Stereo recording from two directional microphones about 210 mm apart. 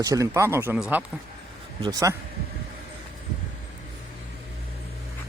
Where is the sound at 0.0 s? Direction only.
15° right (ahead or behind).